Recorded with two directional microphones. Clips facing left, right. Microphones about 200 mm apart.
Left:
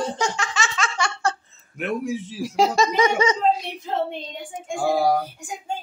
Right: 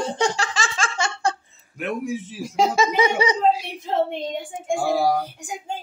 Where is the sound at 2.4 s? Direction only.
Centre (ahead or behind).